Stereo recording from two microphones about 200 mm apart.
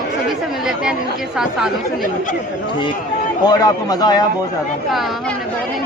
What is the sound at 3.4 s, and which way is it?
Speech, 20° left (ahead or behind).